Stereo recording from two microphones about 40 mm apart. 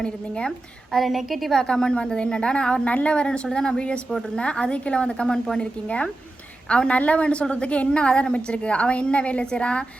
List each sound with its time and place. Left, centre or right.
0.0 s a woman's voice: left
0.9 s a woman's voice: centre
1.6 s a woman's voice: left